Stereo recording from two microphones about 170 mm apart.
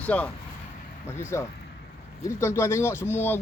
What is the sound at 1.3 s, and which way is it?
Speech, 15° left (ahead or behind).